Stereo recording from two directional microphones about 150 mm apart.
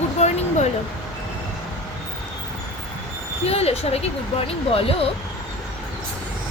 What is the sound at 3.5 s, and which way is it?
Speech, 45° left (ahead or behind).